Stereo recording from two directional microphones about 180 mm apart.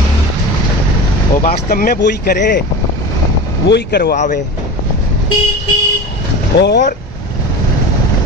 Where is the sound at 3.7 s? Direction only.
60° left (ahead or behind).